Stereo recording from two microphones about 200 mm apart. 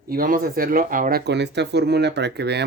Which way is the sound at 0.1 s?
45° right (ahead or behind).